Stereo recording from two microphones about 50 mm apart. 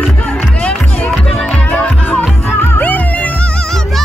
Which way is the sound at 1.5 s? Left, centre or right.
Left.